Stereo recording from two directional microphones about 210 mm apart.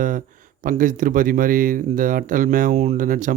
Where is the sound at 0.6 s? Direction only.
40° right (ahead or behind).